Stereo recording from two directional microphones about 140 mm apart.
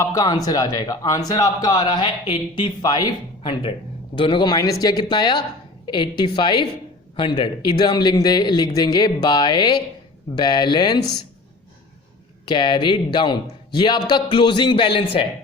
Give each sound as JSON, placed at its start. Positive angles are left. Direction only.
{"t": 0.0, "sound": "a man's voice", "side_deg": 25}
{"t": 12.5, "sound": "a man's voice", "side_deg": 35}